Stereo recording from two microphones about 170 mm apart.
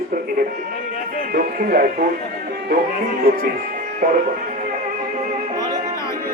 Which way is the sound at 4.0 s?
50° right (ahead or behind).